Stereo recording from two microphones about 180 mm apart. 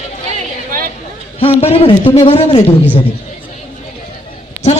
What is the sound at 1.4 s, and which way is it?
A man's voice, 30° left (ahead or behind).